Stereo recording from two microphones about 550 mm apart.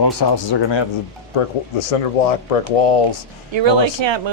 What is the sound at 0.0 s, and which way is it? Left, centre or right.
Speech, left.